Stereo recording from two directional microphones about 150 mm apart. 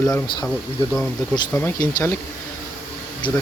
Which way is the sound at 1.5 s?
15° left (ahead or behind).